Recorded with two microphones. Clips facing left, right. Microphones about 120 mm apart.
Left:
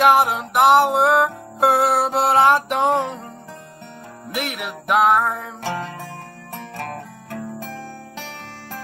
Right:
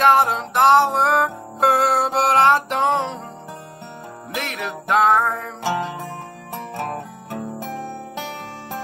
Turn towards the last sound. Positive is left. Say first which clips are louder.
# right 2 dB
turn(degrees=-30)  # may be behind; listen again after turning